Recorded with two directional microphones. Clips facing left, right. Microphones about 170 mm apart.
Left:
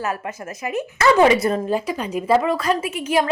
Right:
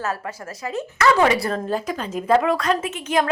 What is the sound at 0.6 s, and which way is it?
A woman's voice, 15° left (ahead or behind).